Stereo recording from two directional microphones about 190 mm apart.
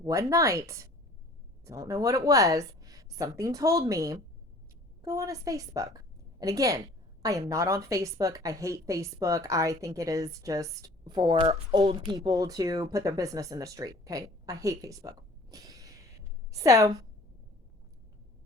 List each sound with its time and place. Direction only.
0.0 s a woman's voice: 15° right (ahead or behind)
12.2 s a woman's voice: 20° right (ahead or behind)